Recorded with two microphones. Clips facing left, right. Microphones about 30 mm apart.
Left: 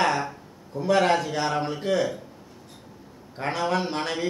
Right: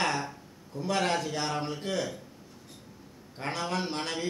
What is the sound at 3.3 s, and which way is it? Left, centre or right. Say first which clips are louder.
Speech: left 7 dB; centre.